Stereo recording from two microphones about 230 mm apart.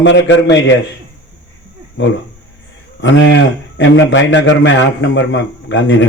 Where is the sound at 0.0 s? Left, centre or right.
Left.